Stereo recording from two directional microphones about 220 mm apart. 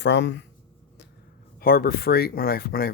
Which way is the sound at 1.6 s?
45° left (ahead or behind).